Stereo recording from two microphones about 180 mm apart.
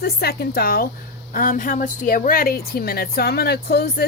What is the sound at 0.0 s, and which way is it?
Speech, 60° left (ahead or behind).